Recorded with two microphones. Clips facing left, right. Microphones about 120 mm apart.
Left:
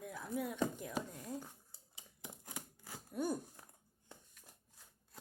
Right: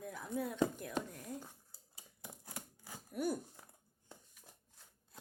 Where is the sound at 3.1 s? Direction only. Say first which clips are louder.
Right 1 dB; 25° left (ahead or behind).